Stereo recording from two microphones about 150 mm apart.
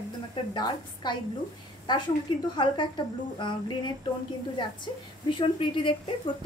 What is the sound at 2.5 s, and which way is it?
A woman's voice, 30° left (ahead or behind).